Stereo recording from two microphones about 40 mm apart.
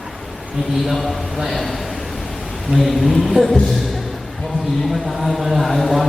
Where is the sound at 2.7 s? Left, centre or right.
Right.